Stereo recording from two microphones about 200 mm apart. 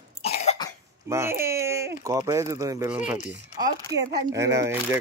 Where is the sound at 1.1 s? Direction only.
15° right (ahead or behind).